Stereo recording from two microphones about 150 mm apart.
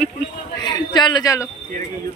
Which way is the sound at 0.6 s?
30° left (ahead or behind).